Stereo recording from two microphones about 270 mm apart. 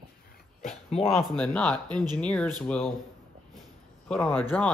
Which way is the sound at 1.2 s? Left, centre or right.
Centre.